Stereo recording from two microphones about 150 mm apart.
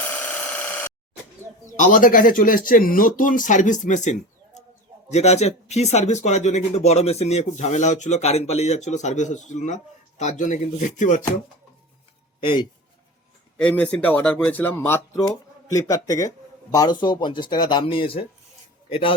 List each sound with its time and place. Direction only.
0.1 s a sound: 10° left (ahead or behind)
1.7 s speech: 60° left (ahead or behind)
4.5 s bird: 50° left (ahead or behind)
5.1 s speech: 45° left (ahead or behind)
12.4 s speech: 35° left (ahead or behind)
13.6 s a man's voice: 10° left (ahead or behind); by 19.1 s 40° left (ahead or behind)